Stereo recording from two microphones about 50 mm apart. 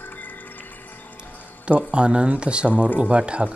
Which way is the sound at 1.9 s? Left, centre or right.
Right.